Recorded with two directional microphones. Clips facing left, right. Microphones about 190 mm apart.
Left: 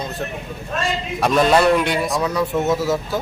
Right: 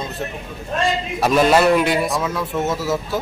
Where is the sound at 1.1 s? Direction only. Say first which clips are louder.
Even; 5° right (ahead or behind).